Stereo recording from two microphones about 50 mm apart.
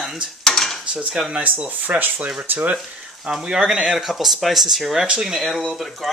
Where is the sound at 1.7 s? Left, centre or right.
Right.